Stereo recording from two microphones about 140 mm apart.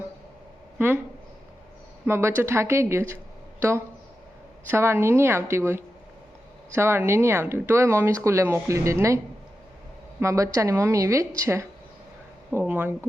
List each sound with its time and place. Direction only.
2.0 s speech: 20° right (ahead or behind)